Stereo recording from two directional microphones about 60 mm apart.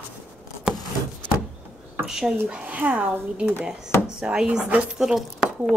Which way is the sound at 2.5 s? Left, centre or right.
Right.